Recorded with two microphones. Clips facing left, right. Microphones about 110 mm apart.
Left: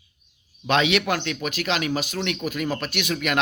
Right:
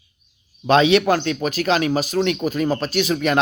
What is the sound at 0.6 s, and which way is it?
Speech, 35° right (ahead or behind).